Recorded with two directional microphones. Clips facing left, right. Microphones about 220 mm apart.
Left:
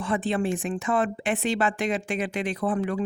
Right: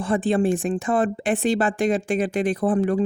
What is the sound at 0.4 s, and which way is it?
Speech, 45° right (ahead or behind).